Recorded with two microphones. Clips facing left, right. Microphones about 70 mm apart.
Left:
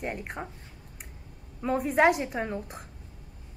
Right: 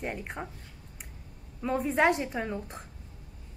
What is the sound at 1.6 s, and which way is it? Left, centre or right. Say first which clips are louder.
A woman's voice: left 2 dB; centre.